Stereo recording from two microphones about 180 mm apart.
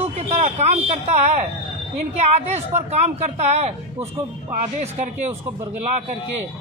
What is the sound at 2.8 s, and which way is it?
Speech, 40° right (ahead or behind).